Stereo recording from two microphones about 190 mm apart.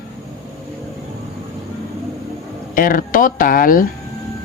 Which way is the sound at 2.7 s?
50° left (ahead or behind).